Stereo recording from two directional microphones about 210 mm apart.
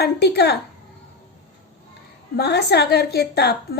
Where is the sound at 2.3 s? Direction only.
50° left (ahead or behind).